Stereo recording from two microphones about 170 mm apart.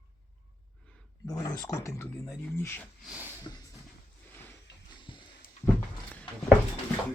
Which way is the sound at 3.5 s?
25° left (ahead or behind).